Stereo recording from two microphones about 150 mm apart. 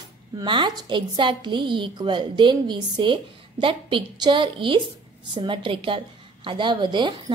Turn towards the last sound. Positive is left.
turn(degrees=-30)  # may be behind; listen again after turning